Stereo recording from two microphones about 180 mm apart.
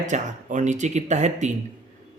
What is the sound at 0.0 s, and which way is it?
Speech, 40° right (ahead or behind).